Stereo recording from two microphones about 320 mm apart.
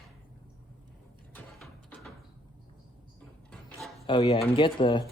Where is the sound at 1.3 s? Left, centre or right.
Centre.